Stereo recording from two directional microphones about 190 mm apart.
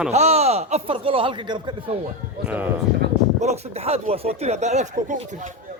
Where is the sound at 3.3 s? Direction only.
35° right (ahead or behind).